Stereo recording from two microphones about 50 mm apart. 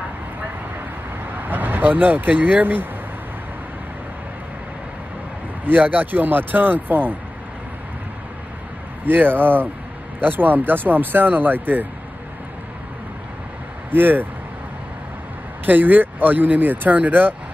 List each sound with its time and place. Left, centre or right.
1.3 s speech: right
5.7 s speech: right
9.0 s speech: right
13.8 s speech: right
15.6 s speech: right